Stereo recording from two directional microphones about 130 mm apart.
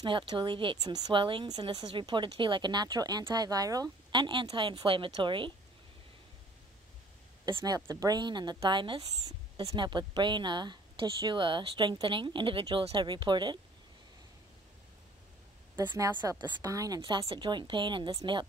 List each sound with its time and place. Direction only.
0.0 s speech: 40° right (ahead or behind)
7.4 s speech: 35° right (ahead or behind)
9.2 s a woman's voice: 50° right (ahead or behind)
9.8 s speech: 35° right (ahead or behind)
15.9 s speech: 35° right (ahead or behind)